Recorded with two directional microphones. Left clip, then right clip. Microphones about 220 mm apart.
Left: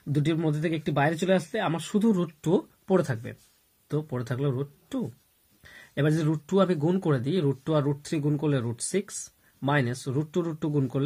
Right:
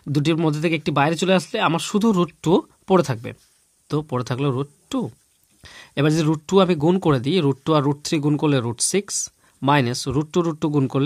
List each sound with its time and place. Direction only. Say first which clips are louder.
0.1 s speech: right 7 dB; 40° right (ahead or behind)